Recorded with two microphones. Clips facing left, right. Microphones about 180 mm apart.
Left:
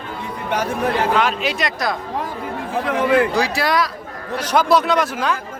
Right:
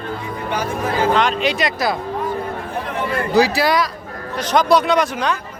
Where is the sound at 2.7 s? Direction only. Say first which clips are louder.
Left 8 dB; 85° left.